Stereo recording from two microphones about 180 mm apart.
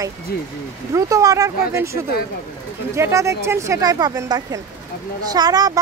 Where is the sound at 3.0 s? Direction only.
15° right (ahead or behind).